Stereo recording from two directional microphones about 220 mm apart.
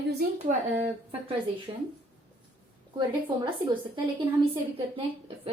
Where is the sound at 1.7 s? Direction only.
25° right (ahead or behind).